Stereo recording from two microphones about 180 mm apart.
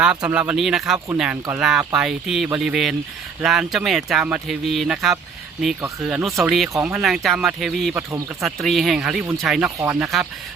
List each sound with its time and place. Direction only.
0.0 s speech: 5° right (ahead or behind)
0.9 s speech: 15° right (ahead or behind)
1.2 s speech: 5° right (ahead or behind)
9.6 s speech: 15° right (ahead or behind)
10.0 s speech: centre (ahead or behind)